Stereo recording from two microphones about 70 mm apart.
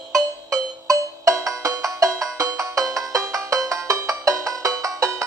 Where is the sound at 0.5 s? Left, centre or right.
Right.